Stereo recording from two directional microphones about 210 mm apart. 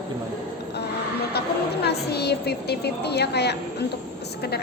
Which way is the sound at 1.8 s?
50° left (ahead or behind).